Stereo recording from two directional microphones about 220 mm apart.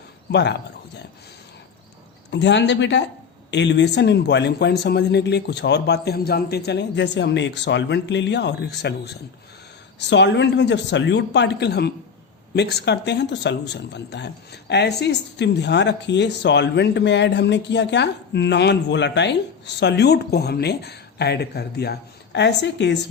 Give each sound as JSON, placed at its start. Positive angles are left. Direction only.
{"t": 0.3, "sound": "a man's voice", "side_deg": 50}
{"t": 2.3, "sound": "speech", "side_deg": 55}